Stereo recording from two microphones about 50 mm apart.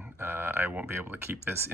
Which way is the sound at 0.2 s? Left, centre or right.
Right.